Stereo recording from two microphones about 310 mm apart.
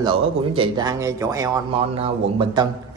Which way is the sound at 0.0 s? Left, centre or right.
Centre.